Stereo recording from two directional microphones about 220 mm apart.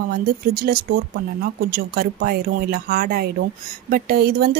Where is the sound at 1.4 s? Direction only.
45° right (ahead or behind).